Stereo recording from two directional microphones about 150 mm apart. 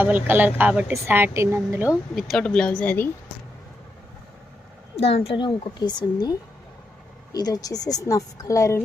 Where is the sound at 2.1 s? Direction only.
Centre (ahead or behind).